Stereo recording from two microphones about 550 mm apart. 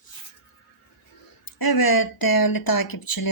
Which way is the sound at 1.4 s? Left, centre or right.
Left.